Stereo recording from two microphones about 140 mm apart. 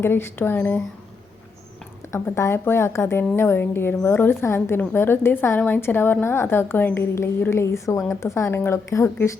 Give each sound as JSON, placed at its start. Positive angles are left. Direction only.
{"t": 0.0, "sound": "a woman's voice", "side_deg": 15}
{"t": 2.1, "sound": "a woman's voice", "side_deg": 15}